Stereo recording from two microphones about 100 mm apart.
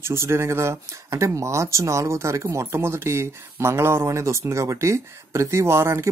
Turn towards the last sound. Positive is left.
turn(degrees=-25)  # may be behind; listen again after turning